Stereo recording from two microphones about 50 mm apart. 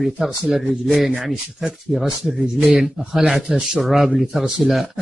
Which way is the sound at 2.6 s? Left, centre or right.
Centre.